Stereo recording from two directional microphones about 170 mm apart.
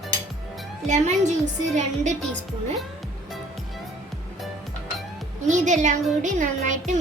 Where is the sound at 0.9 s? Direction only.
45° right (ahead or behind).